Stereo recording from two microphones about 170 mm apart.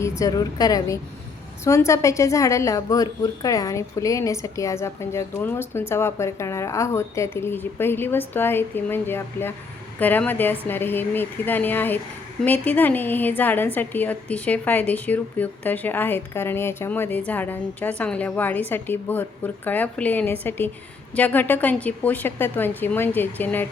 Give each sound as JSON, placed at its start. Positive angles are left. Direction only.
{"t": 0.0, "sound": "a woman's voice", "side_deg": 20}